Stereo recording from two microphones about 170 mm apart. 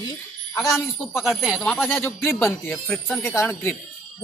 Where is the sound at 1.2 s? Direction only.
5° right (ahead or behind).